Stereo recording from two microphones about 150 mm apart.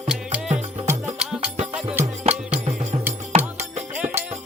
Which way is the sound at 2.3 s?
40° right (ahead or behind).